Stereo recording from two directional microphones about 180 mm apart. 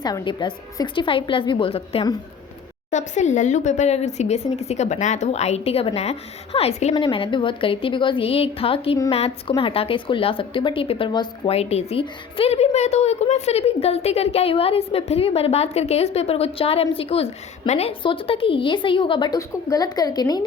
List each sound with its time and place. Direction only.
0.0 s a woman's voice: 25° left (ahead or behind)
2.9 s a woman's voice: 40° left (ahead or behind); by 20.4 s 20° left (ahead or behind)